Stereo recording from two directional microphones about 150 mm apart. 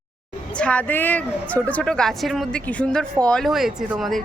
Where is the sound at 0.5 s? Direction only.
10° left (ahead or behind).